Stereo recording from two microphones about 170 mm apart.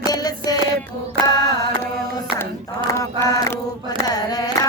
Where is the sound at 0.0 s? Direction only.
20° left (ahead or behind).